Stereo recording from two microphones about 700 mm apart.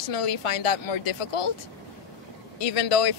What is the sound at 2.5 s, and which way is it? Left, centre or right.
Speech, left.